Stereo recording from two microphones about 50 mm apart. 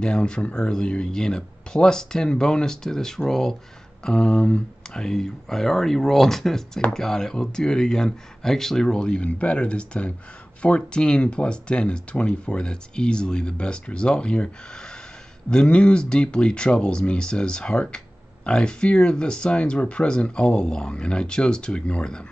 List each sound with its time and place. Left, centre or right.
0.0 s speech: centre